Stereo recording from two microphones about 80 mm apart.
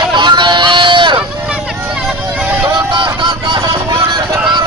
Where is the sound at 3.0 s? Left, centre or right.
Right.